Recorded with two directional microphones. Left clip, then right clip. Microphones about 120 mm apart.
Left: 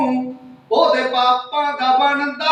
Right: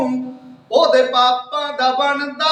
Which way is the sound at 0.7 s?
40° right (ahead or behind).